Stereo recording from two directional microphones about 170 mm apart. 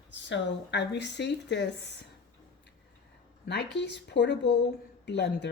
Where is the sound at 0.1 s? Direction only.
90° left.